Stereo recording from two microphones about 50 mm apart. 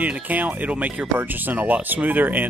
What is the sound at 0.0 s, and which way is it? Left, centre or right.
Speech, right.